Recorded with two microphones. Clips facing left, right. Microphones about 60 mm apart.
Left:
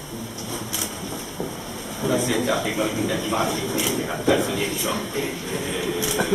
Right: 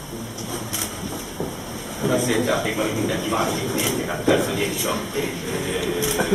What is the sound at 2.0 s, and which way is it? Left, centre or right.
Speech, centre.